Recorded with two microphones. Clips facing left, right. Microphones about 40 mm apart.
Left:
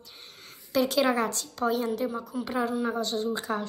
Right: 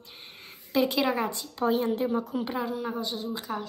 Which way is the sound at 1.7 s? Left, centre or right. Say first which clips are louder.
Right 2 dB; right.